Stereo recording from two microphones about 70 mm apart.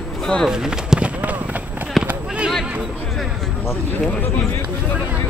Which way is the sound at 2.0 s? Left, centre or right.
Centre.